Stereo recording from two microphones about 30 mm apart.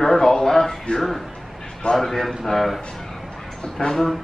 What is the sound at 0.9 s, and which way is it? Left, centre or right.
Speech, left.